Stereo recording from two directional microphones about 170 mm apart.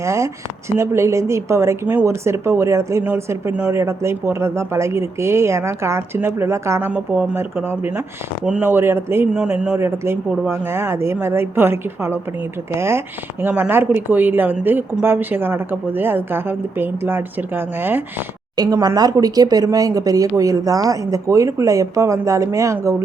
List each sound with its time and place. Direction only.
0.0 s a woman's voice: 15° right (ahead or behind)
18.5 s speech: 25° right (ahead or behind)